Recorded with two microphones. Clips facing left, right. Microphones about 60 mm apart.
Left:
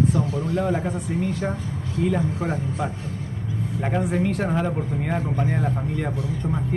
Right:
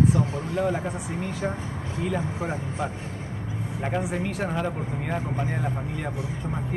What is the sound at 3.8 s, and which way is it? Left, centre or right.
Speech, centre.